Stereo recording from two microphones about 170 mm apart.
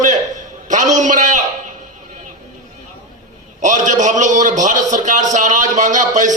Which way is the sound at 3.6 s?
45° right (ahead or behind).